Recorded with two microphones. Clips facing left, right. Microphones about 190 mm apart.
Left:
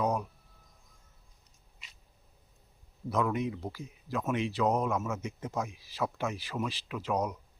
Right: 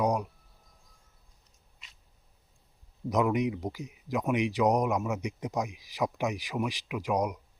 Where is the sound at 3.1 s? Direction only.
15° right (ahead or behind).